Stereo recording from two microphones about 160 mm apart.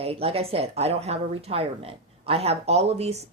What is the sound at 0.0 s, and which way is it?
Speech, 40° right (ahead or behind).